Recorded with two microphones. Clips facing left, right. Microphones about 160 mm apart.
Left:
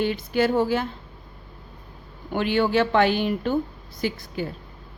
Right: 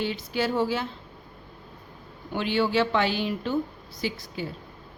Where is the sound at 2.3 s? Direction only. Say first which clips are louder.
Left 3 dB; 55° left (ahead or behind).